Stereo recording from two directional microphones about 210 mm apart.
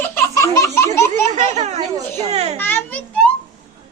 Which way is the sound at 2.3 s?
30° right (ahead or behind).